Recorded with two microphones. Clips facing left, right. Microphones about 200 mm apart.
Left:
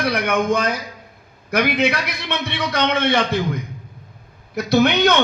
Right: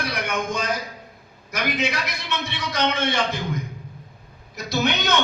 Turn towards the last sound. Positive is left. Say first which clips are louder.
# left 8 dB
turn(degrees=60)  # may be behind; listen again after turning